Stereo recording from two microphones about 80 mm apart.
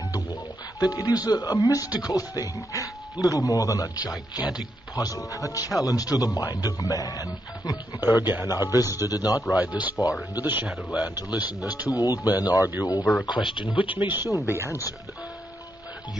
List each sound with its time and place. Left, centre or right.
0.7 s speech: left
4.4 s speech: centre
4.9 s speech: left
8.0 s speech: right
8.5 s speech: left
9.6 s speech: centre
11.9 s speech: left
13.0 s speech: centre
13.6 s speech: left
13.9 s speech: right
14.7 s speech: left